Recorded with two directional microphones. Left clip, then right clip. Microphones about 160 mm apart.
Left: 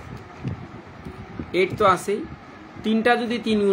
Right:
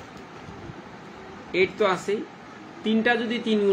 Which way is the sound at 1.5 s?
70° left (ahead or behind).